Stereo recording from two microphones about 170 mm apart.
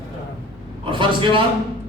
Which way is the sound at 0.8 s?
30° right (ahead or behind).